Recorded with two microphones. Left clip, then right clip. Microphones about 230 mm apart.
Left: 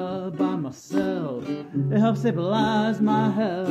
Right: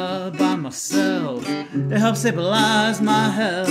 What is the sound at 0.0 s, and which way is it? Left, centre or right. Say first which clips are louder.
Music: right 5 dB; right.